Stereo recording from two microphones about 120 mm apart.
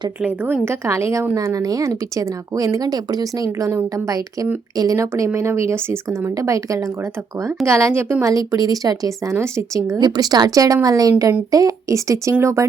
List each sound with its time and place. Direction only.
0.2 s speech: 15° right (ahead or behind)